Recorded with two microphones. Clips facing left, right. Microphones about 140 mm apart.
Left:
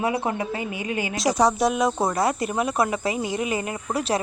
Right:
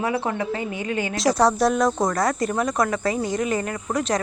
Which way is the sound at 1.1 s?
Centre (ahead or behind).